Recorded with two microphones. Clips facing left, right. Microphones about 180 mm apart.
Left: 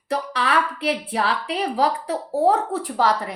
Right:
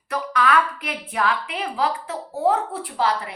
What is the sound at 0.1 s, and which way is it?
A woman's voice, 30° left (ahead or behind).